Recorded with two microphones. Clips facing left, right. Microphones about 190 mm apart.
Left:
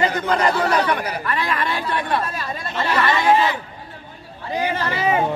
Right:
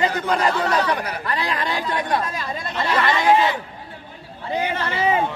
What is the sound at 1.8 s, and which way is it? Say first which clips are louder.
Speech: even; 15° right (ahead or behind).